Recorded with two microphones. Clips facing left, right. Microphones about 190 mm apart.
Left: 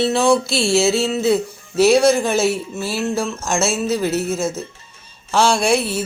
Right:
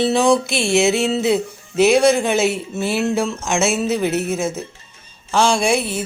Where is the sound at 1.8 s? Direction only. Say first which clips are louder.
Even; 5° left (ahead or behind).